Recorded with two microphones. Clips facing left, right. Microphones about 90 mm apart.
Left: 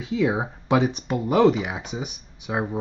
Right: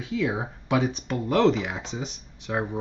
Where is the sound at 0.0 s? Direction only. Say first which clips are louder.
Left 4 dB; 20° left (ahead or behind).